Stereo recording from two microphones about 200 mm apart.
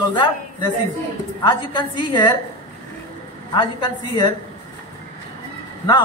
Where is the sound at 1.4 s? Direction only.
20° left (ahead or behind).